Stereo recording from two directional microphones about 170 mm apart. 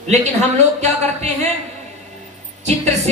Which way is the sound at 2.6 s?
40° right (ahead or behind).